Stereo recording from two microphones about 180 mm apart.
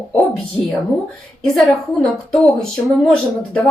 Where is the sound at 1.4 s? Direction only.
5° left (ahead or behind).